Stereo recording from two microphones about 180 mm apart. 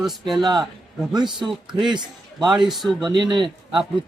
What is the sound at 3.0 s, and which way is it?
Speech, 25° right (ahead or behind).